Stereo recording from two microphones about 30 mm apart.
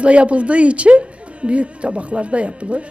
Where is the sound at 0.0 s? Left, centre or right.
Right.